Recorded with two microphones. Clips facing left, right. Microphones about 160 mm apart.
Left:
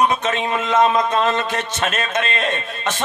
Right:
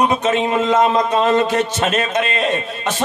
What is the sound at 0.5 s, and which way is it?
Speech, 20° right (ahead or behind).